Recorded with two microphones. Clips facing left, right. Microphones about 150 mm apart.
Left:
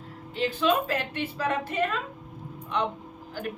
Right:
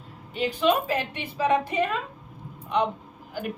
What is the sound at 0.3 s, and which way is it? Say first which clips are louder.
A woman's voice: right 2 dB; 15° right (ahead or behind).